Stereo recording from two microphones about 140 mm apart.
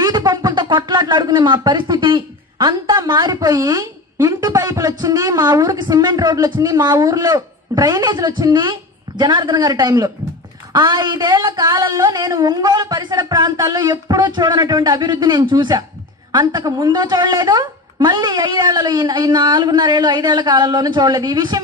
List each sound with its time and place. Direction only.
0.0 s speech: 30° right (ahead or behind)
9.2 s a sound: 30° right (ahead or behind)
16.3 s a woman's voice: 30° right (ahead or behind)